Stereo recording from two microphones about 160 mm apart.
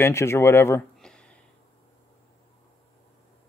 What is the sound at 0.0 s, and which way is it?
Speech, 15° left (ahead or behind).